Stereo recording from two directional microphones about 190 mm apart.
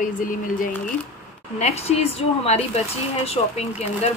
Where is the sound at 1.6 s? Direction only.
35° left (ahead or behind).